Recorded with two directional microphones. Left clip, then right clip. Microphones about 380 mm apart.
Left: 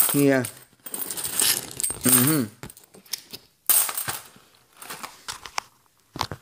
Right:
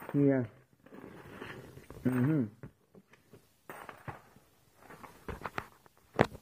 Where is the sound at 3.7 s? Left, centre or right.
Left.